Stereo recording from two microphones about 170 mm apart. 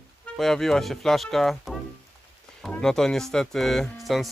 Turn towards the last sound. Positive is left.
turn(degrees=0)  # may be behind; listen again after turning